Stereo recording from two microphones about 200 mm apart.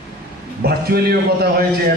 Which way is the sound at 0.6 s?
50° right (ahead or behind).